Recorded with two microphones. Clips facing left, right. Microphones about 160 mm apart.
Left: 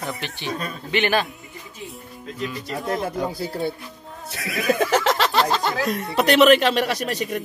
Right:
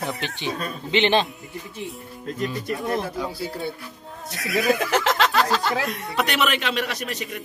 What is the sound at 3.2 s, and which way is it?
Speech, 45° left (ahead or behind).